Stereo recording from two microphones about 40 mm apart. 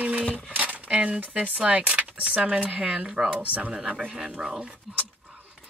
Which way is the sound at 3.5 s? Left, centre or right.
Right.